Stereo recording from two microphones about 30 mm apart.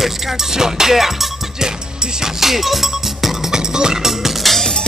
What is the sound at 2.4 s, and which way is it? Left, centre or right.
Music, centre.